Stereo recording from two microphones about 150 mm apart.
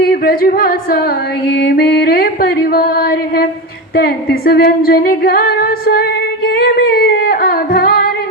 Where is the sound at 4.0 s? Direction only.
90° left.